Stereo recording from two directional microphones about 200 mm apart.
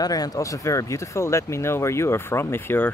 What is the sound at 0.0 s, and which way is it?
Speech, 20° left (ahead or behind).